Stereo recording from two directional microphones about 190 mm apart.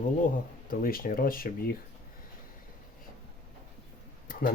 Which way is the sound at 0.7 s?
50° left (ahead or behind).